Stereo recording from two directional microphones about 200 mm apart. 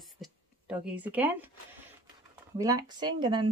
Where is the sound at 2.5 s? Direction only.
15° right (ahead or behind).